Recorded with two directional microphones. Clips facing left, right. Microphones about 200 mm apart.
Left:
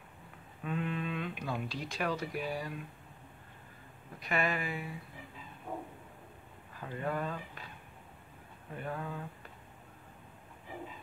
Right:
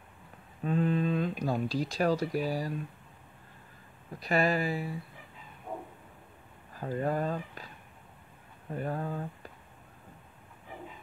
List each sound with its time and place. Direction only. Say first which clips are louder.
0.7 s speech: right 8 dB; 35° right (ahead or behind)
4.2 s speech: right 6 dB; 35° right (ahead or behind)
6.7 s speech: right 6 dB; 40° right (ahead or behind)
8.7 s speech: right 5 dB; 40° right (ahead or behind)